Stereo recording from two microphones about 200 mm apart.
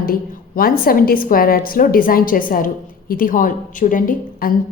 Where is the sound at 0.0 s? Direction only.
45° left (ahead or behind).